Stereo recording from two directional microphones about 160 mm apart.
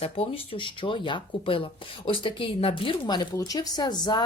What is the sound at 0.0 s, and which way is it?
Speech, 35° left (ahead or behind).